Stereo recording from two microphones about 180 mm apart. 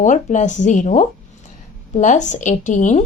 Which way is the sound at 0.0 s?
45° left (ahead or behind).